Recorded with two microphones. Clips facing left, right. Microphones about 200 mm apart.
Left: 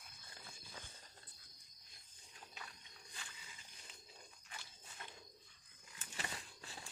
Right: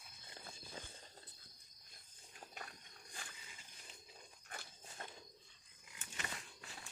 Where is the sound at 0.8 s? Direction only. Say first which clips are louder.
Right 4 dB; 25° right (ahead or behind).